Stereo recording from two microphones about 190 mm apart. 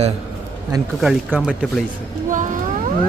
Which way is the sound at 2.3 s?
45° right (ahead or behind).